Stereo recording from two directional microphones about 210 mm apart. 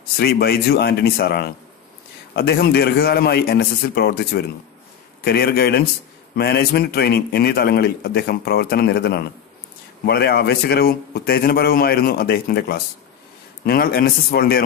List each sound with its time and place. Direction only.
0.2 s a man's voice: 50° left (ahead or behind)